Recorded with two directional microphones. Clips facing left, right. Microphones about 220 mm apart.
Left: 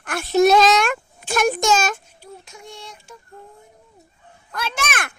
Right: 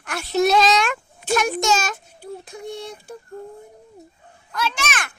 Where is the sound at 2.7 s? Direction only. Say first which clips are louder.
Right 8 dB; 60° right (ahead or behind).